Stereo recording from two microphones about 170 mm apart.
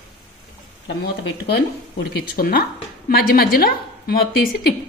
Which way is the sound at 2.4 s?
60° left (ahead or behind).